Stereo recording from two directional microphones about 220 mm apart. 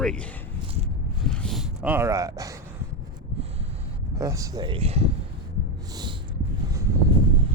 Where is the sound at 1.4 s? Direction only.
Centre (ahead or behind).